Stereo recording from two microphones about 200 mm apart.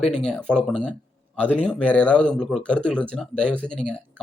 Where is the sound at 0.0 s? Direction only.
5° left (ahead or behind).